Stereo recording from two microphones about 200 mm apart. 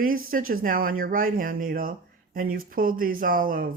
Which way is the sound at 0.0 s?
45° right (ahead or behind).